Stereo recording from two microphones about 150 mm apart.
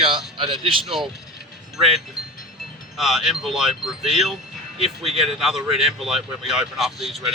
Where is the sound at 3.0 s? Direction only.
Centre (ahead or behind).